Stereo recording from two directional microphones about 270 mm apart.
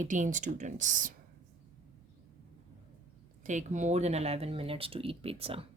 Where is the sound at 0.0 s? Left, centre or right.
Right.